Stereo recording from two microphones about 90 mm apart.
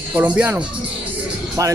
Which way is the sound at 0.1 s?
15° right (ahead or behind).